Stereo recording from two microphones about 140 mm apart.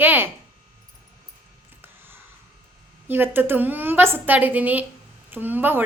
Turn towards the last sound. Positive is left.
turn(degrees=-15)  # may be behind; listen again after turning